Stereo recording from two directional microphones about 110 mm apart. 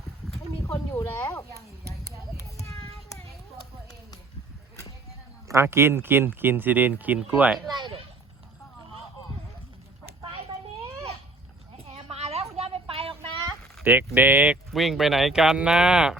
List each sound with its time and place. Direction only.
0.7 s speech: 30° left (ahead or behind)
1.8 s a sound: 25° right (ahead or behind)
2.6 s child singing: 30° left (ahead or behind)
5.5 s speech: 25° right (ahead or behind)
7.5 s speech: centre (ahead or behind)
7.8 s a sound: 50° right (ahead or behind)
11.9 s a sound: 65° right (ahead or behind)
13.8 s speech: 15° right (ahead or behind)
14.7 s speech: centre (ahead or behind)